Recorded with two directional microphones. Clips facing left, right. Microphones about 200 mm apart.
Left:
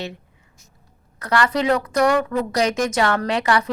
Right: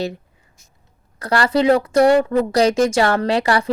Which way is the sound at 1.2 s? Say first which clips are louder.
Right 3 dB; 30° right (ahead or behind).